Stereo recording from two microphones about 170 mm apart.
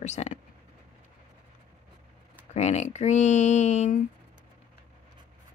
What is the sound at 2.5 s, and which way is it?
Speech, 40° left (ahead or behind).